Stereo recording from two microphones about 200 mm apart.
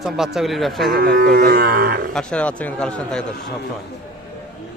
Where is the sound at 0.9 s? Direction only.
45° right (ahead or behind).